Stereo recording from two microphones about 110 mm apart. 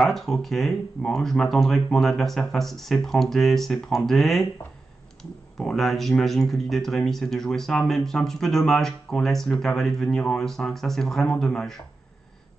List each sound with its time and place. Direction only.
0.1 s speech: centre (ahead or behind)
5.6 s speech: 5° left (ahead or behind)